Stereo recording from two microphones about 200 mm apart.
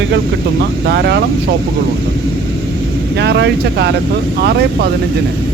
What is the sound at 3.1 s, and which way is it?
A man's voice, 60° right (ahead or behind).